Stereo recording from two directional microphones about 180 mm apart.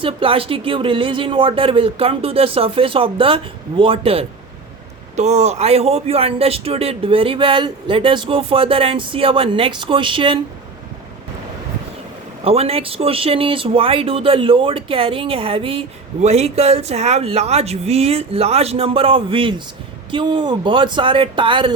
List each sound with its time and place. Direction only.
0.0 s a man's voice: 30° right (ahead or behind)
12.5 s a man's voice: 35° right (ahead or behind)